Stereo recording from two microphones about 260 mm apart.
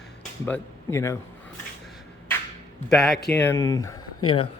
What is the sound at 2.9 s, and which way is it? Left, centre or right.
Speech, centre.